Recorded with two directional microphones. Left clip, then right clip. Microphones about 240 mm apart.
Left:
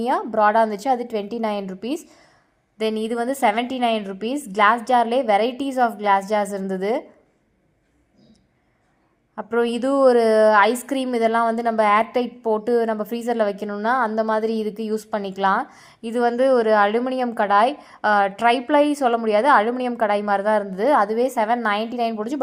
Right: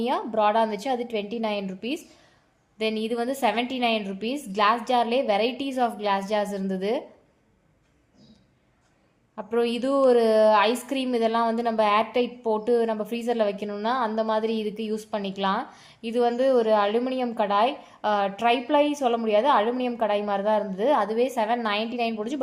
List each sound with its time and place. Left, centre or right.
0.0 s a woman's voice: left
9.3 s a woman's voice: centre